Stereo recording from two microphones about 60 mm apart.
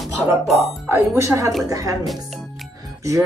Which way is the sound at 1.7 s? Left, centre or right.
Right.